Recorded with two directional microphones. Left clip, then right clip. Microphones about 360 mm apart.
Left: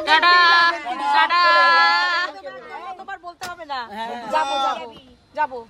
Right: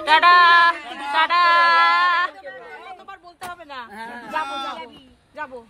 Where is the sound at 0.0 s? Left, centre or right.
Centre.